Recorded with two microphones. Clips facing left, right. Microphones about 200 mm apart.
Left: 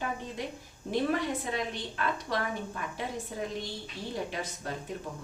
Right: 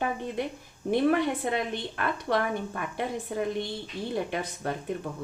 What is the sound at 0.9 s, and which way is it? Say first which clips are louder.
A woman's voice: right 5 dB; 60° right (ahead or behind).